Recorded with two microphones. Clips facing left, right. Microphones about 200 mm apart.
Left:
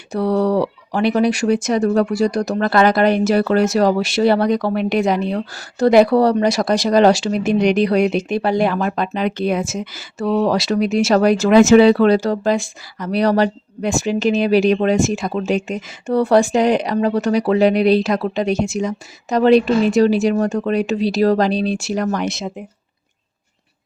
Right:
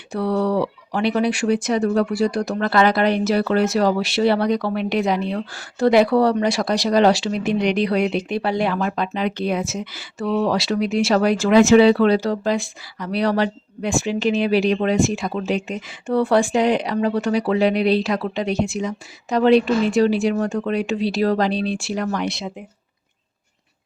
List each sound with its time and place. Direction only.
0.1 s speech: 40° left (ahead or behind)